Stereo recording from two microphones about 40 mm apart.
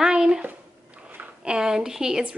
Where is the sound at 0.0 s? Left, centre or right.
Centre.